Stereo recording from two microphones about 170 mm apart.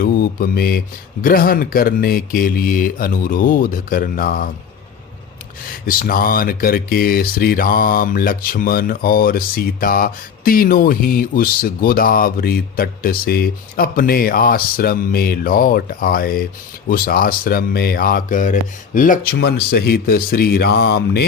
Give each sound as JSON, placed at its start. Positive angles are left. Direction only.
{"t": 0.0, "sound": "speech", "side_deg": 60}
{"t": 5.8, "sound": "speech", "side_deg": 55}